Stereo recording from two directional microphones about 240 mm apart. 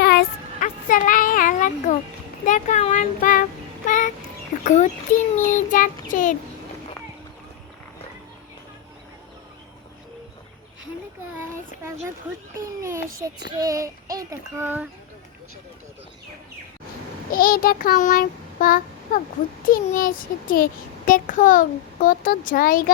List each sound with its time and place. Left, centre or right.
0.0 s child singing: left
2.5 s a child's voice: left
3.8 s a sound: left
4.6 s a child's voice: left
12.5 s child singing: centre
17.3 s child singing: left
19.6 s a child's voice: left